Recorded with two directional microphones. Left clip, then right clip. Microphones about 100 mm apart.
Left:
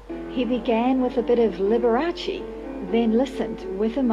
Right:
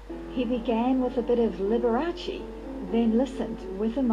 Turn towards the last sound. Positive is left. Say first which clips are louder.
# left 5 dB
turn(degrees=35)  # may be behind; listen again after turning